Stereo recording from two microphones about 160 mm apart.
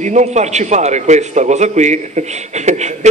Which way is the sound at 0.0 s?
45° right (ahead or behind).